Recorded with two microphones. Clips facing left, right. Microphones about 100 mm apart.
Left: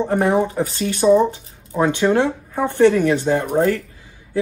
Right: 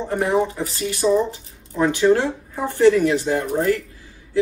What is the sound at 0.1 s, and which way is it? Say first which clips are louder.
Speech: even; 30° left (ahead or behind).